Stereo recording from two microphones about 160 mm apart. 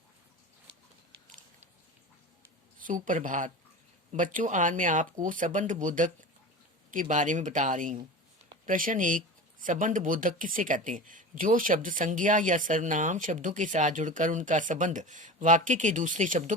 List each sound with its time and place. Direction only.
2.7 s speech: 55° right (ahead or behind)